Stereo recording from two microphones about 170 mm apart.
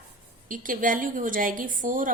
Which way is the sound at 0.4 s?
50° right (ahead or behind).